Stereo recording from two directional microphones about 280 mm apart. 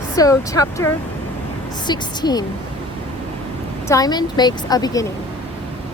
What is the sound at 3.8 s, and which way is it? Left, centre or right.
A woman's voice, centre.